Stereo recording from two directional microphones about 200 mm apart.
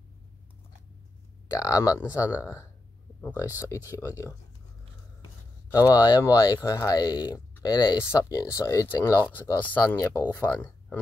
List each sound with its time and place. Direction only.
1.5 s speech: 15° left (ahead or behind)
5.9 s speech: 20° left (ahead or behind)